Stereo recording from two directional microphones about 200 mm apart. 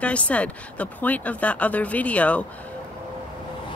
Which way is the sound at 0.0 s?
5° left (ahead or behind).